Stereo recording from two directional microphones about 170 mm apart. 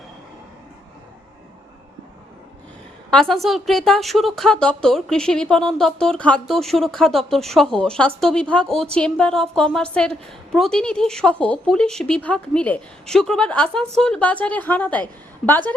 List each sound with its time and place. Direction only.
3.1 s speech: 5° left (ahead or behind)